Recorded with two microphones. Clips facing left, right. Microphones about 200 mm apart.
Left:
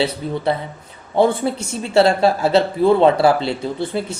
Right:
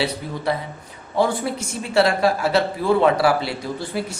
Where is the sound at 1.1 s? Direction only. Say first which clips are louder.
Left 4 dB; 25° left (ahead or behind).